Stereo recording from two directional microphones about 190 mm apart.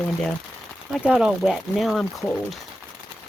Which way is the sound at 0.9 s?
5° right (ahead or behind).